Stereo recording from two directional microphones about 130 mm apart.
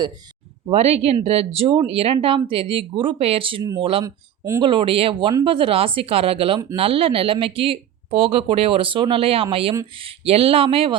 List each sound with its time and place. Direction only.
0.7 s speech: 50° right (ahead or behind)
4.0 s speech: 20° right (ahead or behind)
4.6 s speech: 40° right (ahead or behind)